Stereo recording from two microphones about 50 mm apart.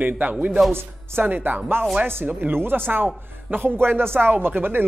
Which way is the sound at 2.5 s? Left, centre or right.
Right.